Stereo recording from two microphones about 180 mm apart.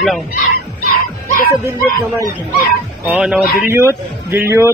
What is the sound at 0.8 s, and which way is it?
Dog, 55° left (ahead or behind).